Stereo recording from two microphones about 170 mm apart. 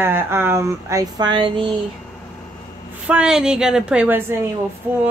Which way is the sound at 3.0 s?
5° right (ahead or behind).